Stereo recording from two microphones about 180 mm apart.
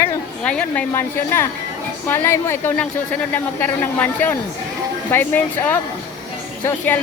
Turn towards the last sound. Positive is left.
turn(degrees=10)  # may be behind; listen again after turning